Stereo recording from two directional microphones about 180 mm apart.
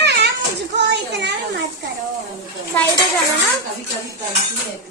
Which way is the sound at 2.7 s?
10° left (ahead or behind).